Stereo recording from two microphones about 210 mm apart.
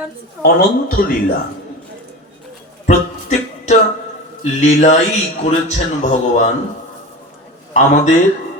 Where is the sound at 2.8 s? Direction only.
35° left (ahead or behind).